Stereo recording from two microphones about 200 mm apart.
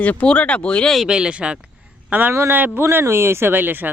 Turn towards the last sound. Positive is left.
turn(degrees=-10)  # may be behind; listen again after turning